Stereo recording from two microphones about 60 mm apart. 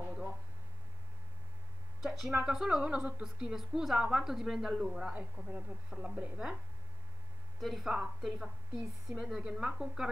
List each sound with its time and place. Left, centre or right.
0.0 s a sound: centre
2.0 s a woman's voice: centre
5.4 s a woman's voice: right
5.9 s a woman's voice: centre
7.6 s a woman's voice: centre